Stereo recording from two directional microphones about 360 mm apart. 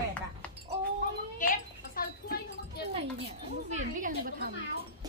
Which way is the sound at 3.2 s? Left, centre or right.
Right.